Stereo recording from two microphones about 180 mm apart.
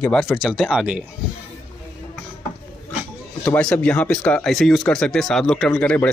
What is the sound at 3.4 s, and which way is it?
Speech, 10° left (ahead or behind).